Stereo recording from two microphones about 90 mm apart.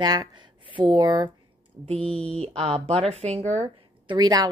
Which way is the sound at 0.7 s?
65° right (ahead or behind).